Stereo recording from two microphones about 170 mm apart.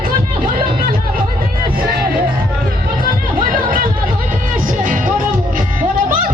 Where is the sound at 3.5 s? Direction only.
55° right (ahead or behind).